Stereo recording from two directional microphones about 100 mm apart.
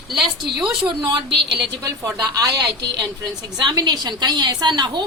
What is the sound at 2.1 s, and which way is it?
Speech, 35° right (ahead or behind).